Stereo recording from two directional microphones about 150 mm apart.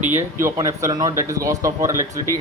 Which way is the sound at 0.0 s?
15° right (ahead or behind).